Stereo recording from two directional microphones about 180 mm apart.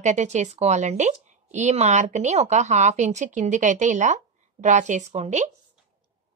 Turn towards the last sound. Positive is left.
turn(degrees=-40)  # may be behind; listen again after turning